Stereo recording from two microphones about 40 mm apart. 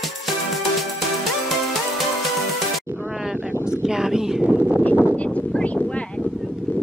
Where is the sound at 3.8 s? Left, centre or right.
Centre.